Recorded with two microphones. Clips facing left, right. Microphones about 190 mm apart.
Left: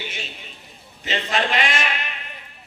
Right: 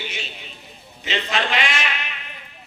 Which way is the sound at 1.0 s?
45° left (ahead or behind).